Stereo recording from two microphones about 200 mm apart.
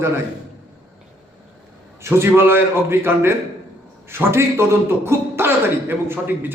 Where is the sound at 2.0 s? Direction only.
10° right (ahead or behind).